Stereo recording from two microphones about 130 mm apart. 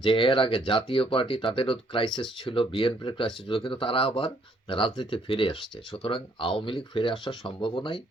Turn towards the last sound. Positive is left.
turn(degrees=40)  # may be behind; listen again after turning